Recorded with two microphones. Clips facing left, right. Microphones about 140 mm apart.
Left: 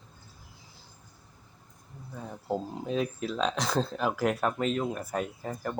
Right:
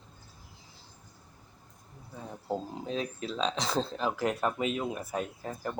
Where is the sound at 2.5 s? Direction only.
5° left (ahead or behind).